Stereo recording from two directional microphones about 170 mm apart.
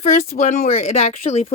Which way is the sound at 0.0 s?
50° left (ahead or behind).